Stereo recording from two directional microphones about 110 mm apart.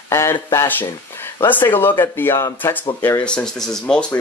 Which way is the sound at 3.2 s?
10° left (ahead or behind).